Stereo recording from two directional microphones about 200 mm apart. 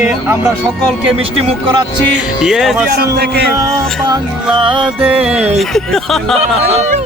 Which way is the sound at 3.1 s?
55° right (ahead or behind).